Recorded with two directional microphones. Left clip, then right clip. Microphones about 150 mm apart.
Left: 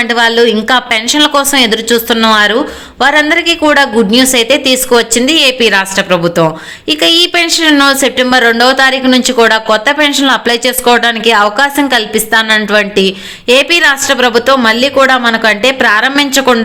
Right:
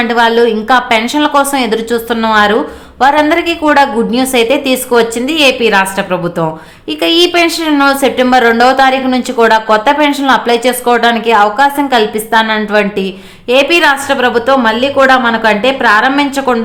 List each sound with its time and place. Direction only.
0.0 s a woman's voice: 15° left (ahead or behind)